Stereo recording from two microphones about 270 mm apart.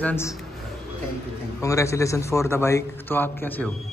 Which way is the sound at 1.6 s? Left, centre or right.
Centre.